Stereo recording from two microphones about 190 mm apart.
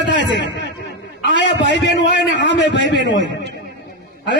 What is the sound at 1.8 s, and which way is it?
A man's voice, 70° left (ahead or behind).